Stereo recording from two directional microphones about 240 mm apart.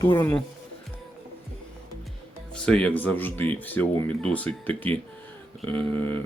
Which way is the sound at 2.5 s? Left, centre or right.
Centre.